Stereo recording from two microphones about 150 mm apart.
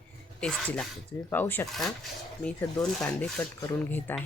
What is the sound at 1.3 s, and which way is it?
Speech, 10° left (ahead or behind).